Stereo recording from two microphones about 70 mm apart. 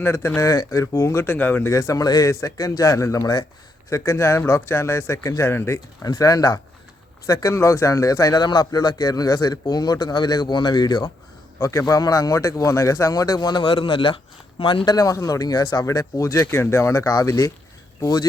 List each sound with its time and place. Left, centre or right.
0.0 s a man's voice: left
0.5 s a man's voice: left
1.3 s speech: left
1.6 s a man's voice: left
3.8 s a man's voice: left
6.0 s a man's voice: left
7.3 s a man's voice: left
8.4 s a man's voice: left
11.6 s a man's voice: left
11.9 s a man's voice: left
14.8 s a man's voice: left
16.5 s a man's voice: left
18.0 s a man's voice: left